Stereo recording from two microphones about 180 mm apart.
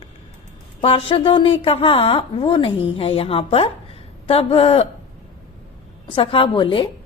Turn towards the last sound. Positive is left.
turn(degrees=30)  # may be behind; listen again after turning